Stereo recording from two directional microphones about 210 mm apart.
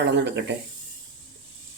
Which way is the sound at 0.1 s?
55° right (ahead or behind).